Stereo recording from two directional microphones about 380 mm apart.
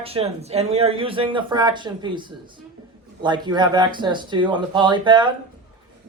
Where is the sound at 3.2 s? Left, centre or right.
Centre.